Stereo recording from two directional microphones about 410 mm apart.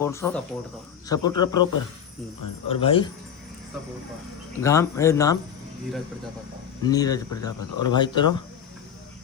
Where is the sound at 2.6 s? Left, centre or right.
Centre.